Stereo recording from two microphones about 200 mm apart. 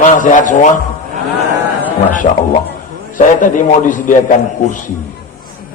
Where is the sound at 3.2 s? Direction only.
40° left (ahead or behind).